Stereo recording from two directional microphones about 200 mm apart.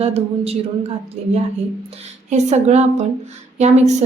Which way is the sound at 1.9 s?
35° right (ahead or behind).